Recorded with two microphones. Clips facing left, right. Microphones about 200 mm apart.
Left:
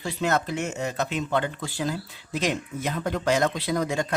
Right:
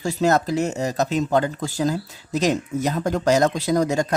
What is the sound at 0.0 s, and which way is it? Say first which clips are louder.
Speech: right 6 dB; 40° right (ahead or behind).